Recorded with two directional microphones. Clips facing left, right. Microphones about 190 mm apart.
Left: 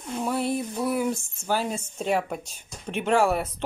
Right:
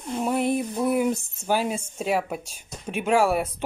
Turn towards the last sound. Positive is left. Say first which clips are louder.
# right 1 dB
turn(degrees=-10)  # may be behind; listen again after turning